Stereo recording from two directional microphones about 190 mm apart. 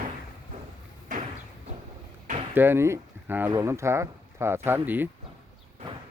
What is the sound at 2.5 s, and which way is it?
Speech, 10° right (ahead or behind).